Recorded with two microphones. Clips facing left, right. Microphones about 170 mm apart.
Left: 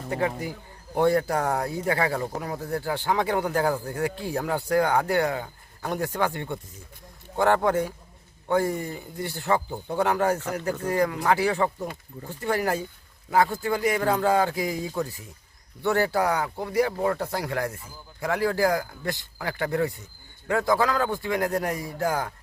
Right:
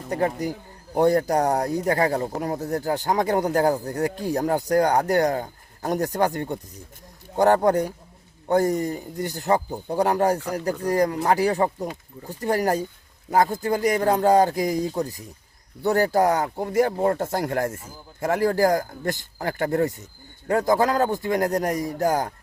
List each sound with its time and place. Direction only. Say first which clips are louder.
0.1 s speech: right 3 dB; 40° right (ahead or behind)